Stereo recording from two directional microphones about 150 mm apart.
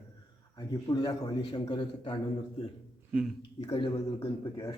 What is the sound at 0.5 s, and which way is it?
A man's voice, 25° left (ahead or behind).